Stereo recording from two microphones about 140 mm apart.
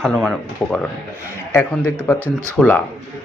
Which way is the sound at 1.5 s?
15° left (ahead or behind).